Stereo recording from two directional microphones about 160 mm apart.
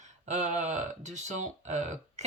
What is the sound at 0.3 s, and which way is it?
Speech, 45° right (ahead or behind).